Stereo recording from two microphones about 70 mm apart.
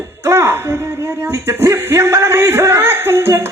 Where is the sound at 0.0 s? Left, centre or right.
Right.